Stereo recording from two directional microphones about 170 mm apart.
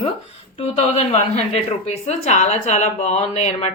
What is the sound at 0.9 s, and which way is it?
A woman's voice, 40° left (ahead or behind).